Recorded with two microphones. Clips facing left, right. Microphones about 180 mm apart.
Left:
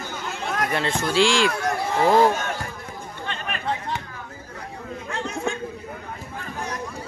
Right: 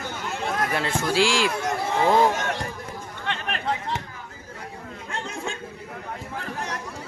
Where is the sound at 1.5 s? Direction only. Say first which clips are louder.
Left 1 dB; 20° right (ahead or behind).